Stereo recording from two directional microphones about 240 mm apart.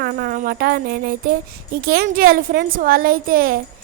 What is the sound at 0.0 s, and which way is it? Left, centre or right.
A woman's voice, right.